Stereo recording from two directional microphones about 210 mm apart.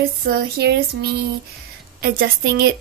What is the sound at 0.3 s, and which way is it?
A woman's voice, 50° right (ahead or behind).